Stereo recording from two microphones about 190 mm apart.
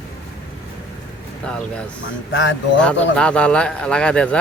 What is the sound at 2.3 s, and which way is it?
Speech, 75° left (ahead or behind).